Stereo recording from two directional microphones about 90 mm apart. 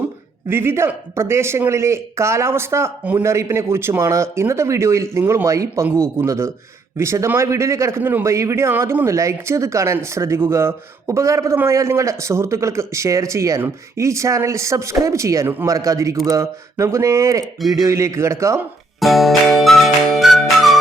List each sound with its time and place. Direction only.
0.4 s a man's voice: 25° right (ahead or behind)
3.0 s a man's voice: 20° right (ahead or behind)
3.2 s speech: 30° right (ahead or behind)
18.9 s music: centre (ahead or behind)